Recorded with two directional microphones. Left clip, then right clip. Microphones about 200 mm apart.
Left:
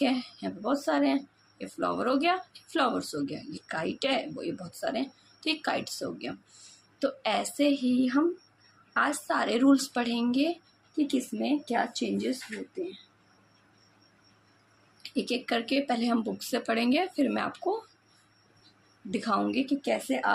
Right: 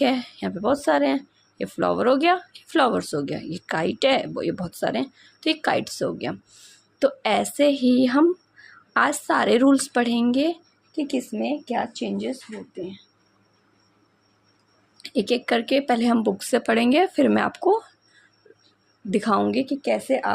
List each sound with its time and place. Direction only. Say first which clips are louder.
0.0 s speech: right 7 dB; 45° right (ahead or behind)
11.7 s speech: right 3 dB; 30° right (ahead or behind)
15.0 s speech: right 8 dB; 45° right (ahead or behind)
19.1 s speech: right 7 dB; 45° right (ahead or behind)